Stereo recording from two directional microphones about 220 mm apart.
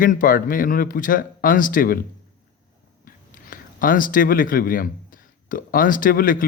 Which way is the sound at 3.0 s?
40° left (ahead or behind).